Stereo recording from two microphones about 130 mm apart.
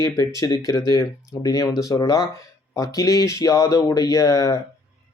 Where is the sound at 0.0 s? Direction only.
25° left (ahead or behind).